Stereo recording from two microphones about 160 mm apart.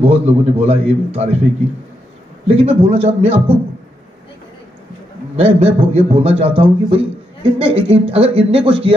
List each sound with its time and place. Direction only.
0.0 s a man's voice: 40° right (ahead or behind)
2.4 s a man's voice: 40° right (ahead or behind)
5.3 s a man's voice: 40° right (ahead or behind)